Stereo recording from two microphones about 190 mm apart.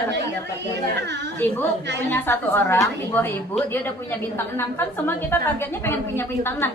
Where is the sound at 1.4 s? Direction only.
10° left (ahead or behind).